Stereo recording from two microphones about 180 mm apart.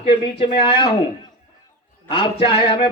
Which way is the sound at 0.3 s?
30° left (ahead or behind).